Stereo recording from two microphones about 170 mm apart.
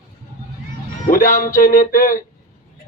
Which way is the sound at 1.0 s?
50° left (ahead or behind).